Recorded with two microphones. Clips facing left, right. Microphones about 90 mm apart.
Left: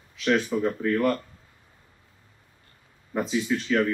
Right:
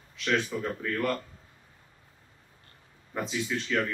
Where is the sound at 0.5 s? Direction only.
25° left (ahead or behind).